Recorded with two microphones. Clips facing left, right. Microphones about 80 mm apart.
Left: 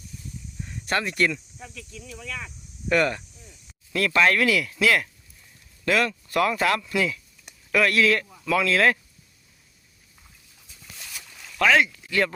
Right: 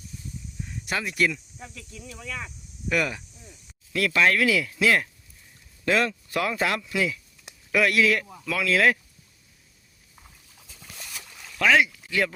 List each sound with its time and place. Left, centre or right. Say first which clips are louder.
0.7 s speech: left 4 dB; centre
4.4 s speech: left 1 dB; centre
11.1 s a sound: even; centre
11.8 s speech: left 1 dB; centre